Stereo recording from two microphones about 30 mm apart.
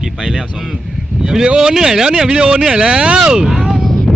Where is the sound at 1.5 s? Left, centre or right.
Centre.